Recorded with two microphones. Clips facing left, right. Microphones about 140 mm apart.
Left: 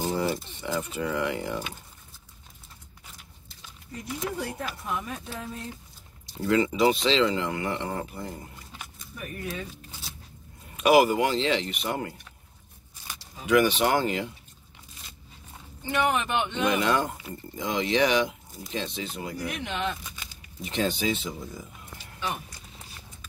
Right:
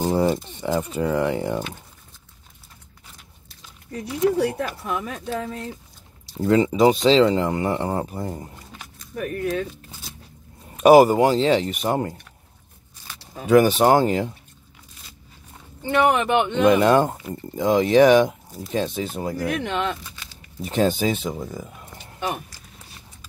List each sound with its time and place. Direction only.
0.2 s speech: 40° right (ahead or behind)
3.9 s speech: 75° right (ahead or behind)
6.4 s speech: 30° right (ahead or behind)
9.1 s speech: 70° right (ahead or behind)
10.8 s speech: 40° right (ahead or behind)
13.5 s speech: 40° right (ahead or behind)
15.9 s speech: 60° right (ahead or behind)
19.3 s speech: 60° right (ahead or behind)
20.6 s speech: 45° right (ahead or behind)